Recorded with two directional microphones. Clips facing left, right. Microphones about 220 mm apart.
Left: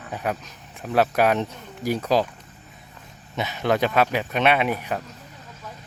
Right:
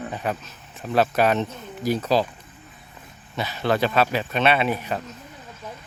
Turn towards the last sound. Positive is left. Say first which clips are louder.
# even
turn(degrees=10)  # may be behind; listen again after turning